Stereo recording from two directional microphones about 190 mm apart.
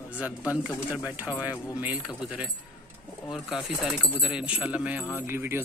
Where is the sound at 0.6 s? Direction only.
5° right (ahead or behind).